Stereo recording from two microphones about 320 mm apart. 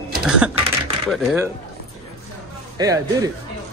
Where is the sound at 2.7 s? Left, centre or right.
Centre.